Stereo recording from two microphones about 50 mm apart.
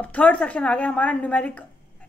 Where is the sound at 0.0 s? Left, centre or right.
Left.